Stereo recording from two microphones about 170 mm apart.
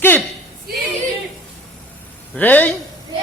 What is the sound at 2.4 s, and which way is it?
Speech, 10° left (ahead or behind).